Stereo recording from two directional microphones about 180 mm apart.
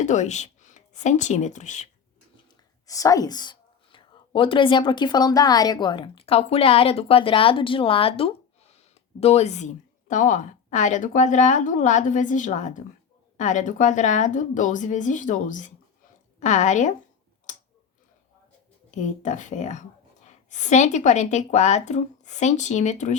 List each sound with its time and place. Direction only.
0.0 s speech: 40° left (ahead or behind)
2.8 s a woman's voice: 20° left (ahead or behind); by 16.9 s 40° left (ahead or behind)
18.9 s speech: 40° left (ahead or behind)